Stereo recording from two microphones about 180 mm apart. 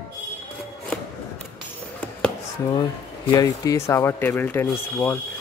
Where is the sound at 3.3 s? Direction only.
20° left (ahead or behind).